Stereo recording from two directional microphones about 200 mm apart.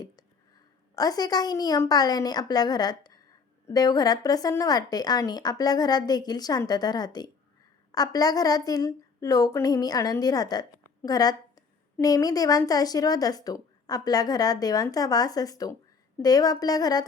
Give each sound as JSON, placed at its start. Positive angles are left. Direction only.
{"t": 0.9, "sound": "a woman's voice", "side_deg": 20}